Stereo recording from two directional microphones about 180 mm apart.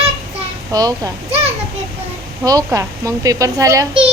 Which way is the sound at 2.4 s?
20° right (ahead or behind).